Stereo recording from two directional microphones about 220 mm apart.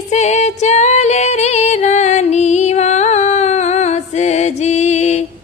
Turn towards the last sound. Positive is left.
turn(degrees=30)  # may be behind; listen again after turning